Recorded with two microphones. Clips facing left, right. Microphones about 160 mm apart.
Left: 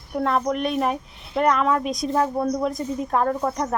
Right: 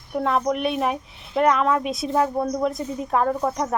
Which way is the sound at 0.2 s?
Centre (ahead or behind).